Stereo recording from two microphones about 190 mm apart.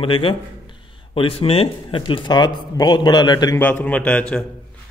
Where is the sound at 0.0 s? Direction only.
25° left (ahead or behind).